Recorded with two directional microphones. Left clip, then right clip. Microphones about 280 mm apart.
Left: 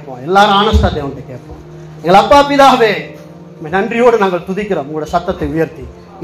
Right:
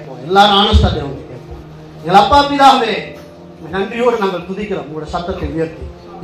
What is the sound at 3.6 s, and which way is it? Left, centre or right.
A man's voice, left.